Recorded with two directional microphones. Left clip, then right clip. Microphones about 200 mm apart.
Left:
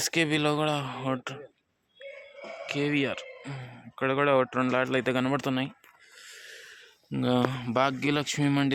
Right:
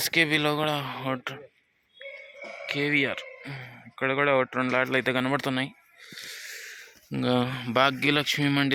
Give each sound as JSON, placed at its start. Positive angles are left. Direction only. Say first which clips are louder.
{"t": 0.0, "sound": "speech", "louder": "right 3 dB", "side_deg": 10}
{"t": 2.6, "sound": "speech", "louder": "right 3 dB", "side_deg": 10}
{"t": 6.2, "sound": "a sound", "louder": "right 6 dB", "side_deg": 10}
{"t": 7.1, "sound": "speech", "louder": "right 1 dB", "side_deg": 0}